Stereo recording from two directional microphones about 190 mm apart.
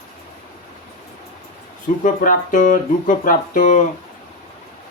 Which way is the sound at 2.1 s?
45° left (ahead or behind).